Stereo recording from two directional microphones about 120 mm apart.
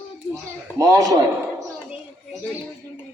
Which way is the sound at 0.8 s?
30° right (ahead or behind).